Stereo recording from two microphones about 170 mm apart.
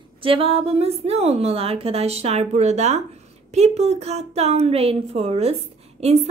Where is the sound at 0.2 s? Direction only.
35° right (ahead or behind).